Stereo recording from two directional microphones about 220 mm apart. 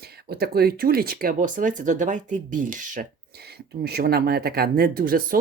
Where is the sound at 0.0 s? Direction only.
45° right (ahead or behind).